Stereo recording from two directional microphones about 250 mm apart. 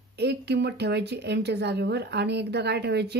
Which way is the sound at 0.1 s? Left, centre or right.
Right.